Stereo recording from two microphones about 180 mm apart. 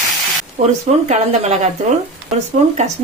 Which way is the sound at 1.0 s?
40° right (ahead or behind).